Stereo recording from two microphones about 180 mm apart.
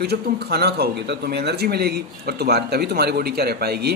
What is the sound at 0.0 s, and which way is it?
Speech, 65° right (ahead or behind).